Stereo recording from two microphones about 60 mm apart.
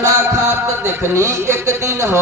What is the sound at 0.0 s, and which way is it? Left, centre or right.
Speech, right.